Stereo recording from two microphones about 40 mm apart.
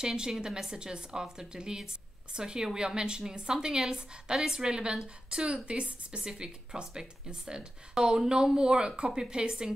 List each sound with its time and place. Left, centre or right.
0.0 s a woman's voice: centre